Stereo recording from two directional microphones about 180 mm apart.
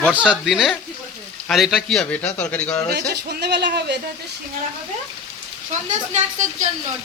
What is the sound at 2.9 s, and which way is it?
Speech, 65° right (ahead or behind).